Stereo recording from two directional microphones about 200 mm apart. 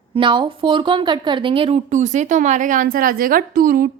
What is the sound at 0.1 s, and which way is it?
Speech, 25° right (ahead or behind).